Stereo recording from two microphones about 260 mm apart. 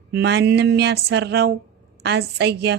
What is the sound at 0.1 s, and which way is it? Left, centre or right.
A woman's voice, right.